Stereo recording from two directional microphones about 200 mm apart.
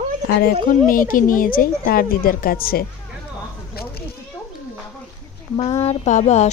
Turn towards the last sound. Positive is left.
turn(degrees=35)  # may be behind; listen again after turning